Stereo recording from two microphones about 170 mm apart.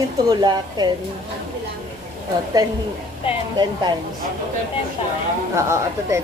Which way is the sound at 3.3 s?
30° left (ahead or behind).